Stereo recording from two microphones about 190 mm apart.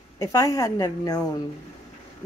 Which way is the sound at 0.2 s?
15° left (ahead or behind).